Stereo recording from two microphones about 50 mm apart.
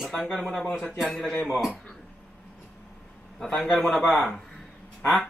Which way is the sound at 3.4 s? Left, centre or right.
Centre.